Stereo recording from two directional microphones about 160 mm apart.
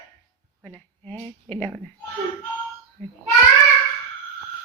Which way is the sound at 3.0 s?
15° left (ahead or behind).